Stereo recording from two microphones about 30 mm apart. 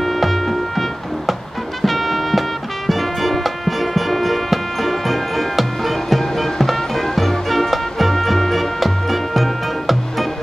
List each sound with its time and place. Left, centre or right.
0.0 s music: centre